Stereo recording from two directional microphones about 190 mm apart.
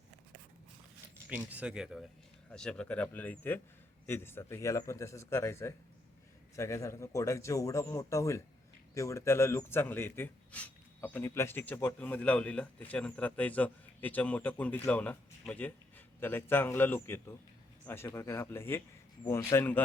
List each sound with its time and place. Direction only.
1.3 s a man's voice: 10° right (ahead or behind); by 19.8 s 10° left (ahead or behind)